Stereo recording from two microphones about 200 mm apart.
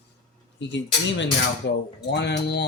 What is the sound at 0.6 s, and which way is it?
Cutlery, 65° left (ahead or behind).